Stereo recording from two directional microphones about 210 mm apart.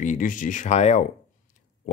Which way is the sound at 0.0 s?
35° left (ahead or behind).